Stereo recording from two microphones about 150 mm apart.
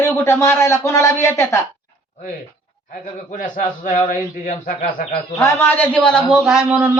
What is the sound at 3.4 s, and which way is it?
A man's voice, 65° left (ahead or behind).